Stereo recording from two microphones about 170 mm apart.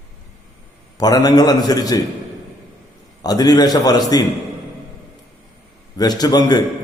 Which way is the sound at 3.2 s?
25° left (ahead or behind).